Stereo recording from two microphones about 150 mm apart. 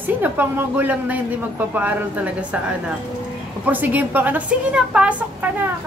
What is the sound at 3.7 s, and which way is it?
A woman's voice, 10° right (ahead or behind).